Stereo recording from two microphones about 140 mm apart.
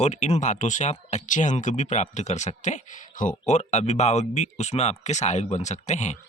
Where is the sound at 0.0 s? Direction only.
55° left (ahead or behind).